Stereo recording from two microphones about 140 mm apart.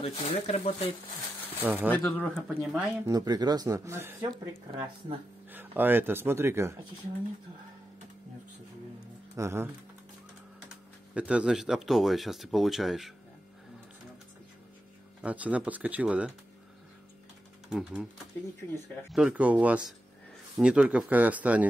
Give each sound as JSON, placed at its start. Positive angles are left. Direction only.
{"t": 0.2, "sound": "speech", "side_deg": 45}
{"t": 1.6, "sound": "speech", "side_deg": -10}
{"t": 1.9, "sound": "speech", "side_deg": 10}
{"t": 2.3, "sound": "speech", "side_deg": 0}
{"t": 3.1, "sound": "speech", "side_deg": -25}
{"t": 4.2, "sound": "speech", "side_deg": -30}
{"t": 5.5, "sound": "speech", "side_deg": -15}
{"t": 9.3, "sound": "speech", "side_deg": -20}
{"t": 11.1, "sound": "speech", "side_deg": -5}
{"t": 15.2, "sound": "speech", "side_deg": -10}
{"t": 17.6, "sound": "speech", "side_deg": -5}
{"t": 19.1, "sound": "speech", "side_deg": -10}